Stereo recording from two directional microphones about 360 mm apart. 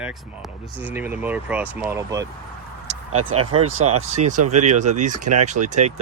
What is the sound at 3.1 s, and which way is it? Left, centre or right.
Speech, right.